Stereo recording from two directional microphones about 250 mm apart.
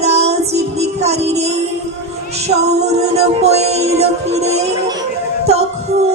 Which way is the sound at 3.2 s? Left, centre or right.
Right.